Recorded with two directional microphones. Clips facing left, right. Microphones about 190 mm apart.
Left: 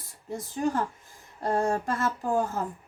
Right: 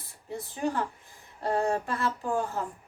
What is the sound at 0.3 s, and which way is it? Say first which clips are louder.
A woman's voice: left 2 dB; 45° left (ahead or behind).